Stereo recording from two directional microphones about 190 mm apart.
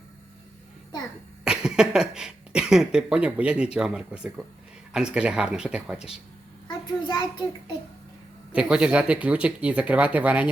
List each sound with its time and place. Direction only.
1.5 s speech: 5° right (ahead or behind)
6.7 s a sound: 20° left (ahead or behind)
8.5 s speech: 5° right (ahead or behind)